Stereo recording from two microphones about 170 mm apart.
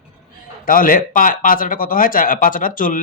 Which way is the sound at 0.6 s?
55° left (ahead or behind).